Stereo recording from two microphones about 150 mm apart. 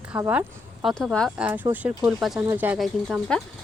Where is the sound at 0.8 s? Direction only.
5° left (ahead or behind).